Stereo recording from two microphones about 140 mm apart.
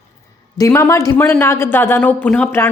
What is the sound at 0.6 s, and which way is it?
A woman's voice, 20° left (ahead or behind).